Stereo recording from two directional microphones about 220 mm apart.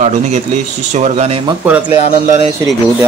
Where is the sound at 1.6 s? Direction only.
10° right (ahead or behind).